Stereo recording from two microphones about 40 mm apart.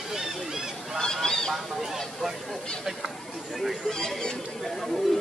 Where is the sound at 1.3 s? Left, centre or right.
Centre.